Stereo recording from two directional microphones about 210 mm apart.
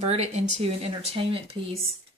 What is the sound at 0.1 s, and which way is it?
Speech, 30° right (ahead or behind).